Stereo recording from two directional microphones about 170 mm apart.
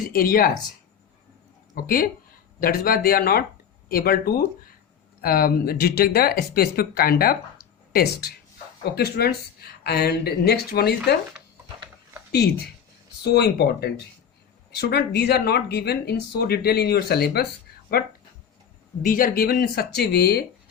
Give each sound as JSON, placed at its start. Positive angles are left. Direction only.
{"t": 0.0, "sound": "speech", "side_deg": 60}
{"t": 1.7, "sound": "speech", "side_deg": 60}
{"t": 8.8, "sound": "speech", "side_deg": 75}
{"t": 13.2, "sound": "speech", "side_deg": 70}
{"t": 19.0, "sound": "speech", "side_deg": 55}